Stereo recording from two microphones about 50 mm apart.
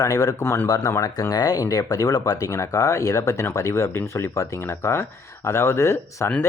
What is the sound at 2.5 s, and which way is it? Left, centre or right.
Speech, left.